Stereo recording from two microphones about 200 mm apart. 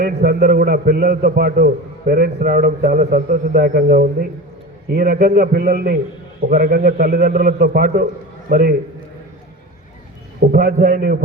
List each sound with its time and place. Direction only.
0.0 s a man's voice: 45° right (ahead or behind)
10.4 s a man's voice: 45° right (ahead or behind)